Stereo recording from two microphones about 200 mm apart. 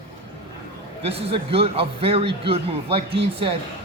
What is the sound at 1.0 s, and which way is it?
A man's voice, 30° right (ahead or behind).